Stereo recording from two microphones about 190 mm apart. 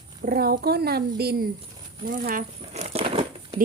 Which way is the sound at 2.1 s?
45° right (ahead or behind).